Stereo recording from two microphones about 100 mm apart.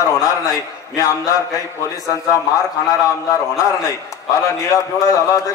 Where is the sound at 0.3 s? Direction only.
35° left (ahead or behind).